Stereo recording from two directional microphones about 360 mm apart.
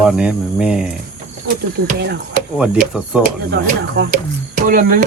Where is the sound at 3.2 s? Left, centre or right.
Right.